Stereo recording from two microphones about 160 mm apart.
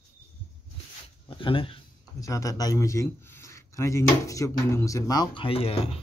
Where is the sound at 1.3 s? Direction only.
35° left (ahead or behind).